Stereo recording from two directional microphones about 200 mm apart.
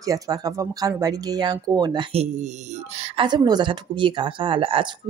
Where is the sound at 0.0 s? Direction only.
20° right (ahead or behind).